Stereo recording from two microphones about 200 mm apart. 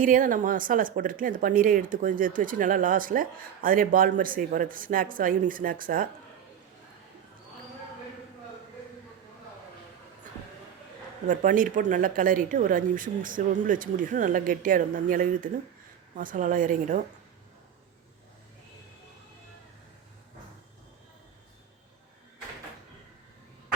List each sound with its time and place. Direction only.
0.0 s speech: 45° right (ahead or behind)
11.3 s a woman's voice: 40° right (ahead or behind)